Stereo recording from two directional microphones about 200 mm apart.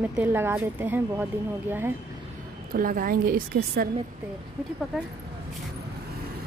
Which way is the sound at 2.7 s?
45° right (ahead or behind).